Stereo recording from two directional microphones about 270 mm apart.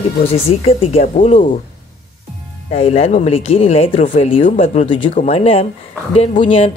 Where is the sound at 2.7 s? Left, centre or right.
Left.